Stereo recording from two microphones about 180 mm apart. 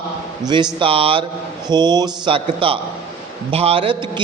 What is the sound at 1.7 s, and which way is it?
Mantra, 25° right (ahead or behind).